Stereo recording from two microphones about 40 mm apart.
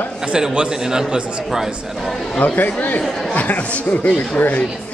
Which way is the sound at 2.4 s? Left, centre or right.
Left.